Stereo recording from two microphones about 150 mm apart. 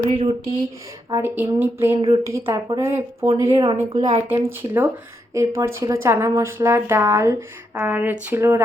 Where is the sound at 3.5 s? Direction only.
35° right (ahead or behind).